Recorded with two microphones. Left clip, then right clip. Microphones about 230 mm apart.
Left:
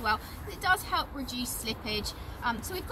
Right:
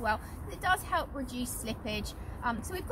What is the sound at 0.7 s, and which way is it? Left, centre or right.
Speech, centre.